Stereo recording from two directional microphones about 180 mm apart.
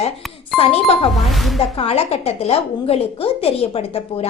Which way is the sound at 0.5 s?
Centre (ahead or behind).